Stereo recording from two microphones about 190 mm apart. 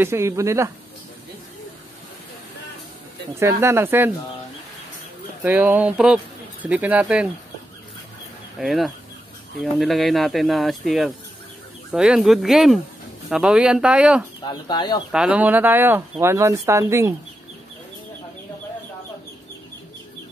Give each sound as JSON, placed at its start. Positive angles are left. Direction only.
{"t": 0.0, "sound": "speech", "side_deg": -15}
{"t": 3.3, "sound": "speech", "side_deg": -15}
{"t": 5.4, "sound": "speech", "side_deg": -10}
{"t": 8.5, "sound": "speech", "side_deg": 0}
{"t": 14.5, "sound": "speech", "side_deg": 25}
{"t": 15.0, "sound": "speech", "side_deg": -5}